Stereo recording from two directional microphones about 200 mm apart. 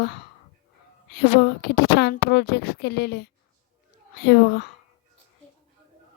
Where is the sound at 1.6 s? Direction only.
50° left (ahead or behind).